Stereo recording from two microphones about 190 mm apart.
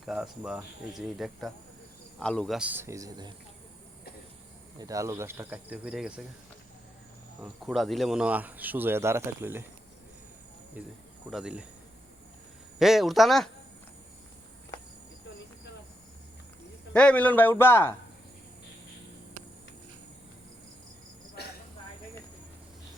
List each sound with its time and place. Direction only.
0.0 s speech: centre (ahead or behind)
2.6 s speech: 10° right (ahead or behind)
4.8 s speech: 15° right (ahead or behind)
7.4 s speech: centre (ahead or behind)
10.8 s speech: 10° right (ahead or behind)
12.8 s speech: centre (ahead or behind)
16.9 s a man's voice: 5° left (ahead or behind)
21.4 s a sound: 55° left (ahead or behind)